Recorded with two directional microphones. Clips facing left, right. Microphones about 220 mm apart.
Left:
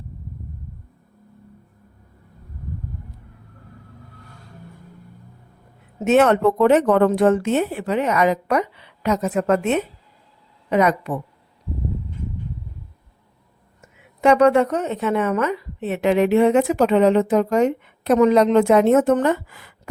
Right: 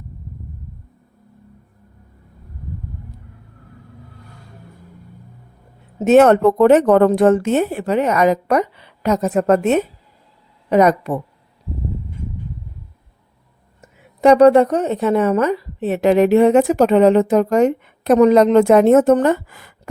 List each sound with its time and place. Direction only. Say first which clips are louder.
6.1 s a woman's voice: right 5 dB; 40° right (ahead or behind)
13.8 s a woman's voice: right 4 dB; 35° right (ahead or behind)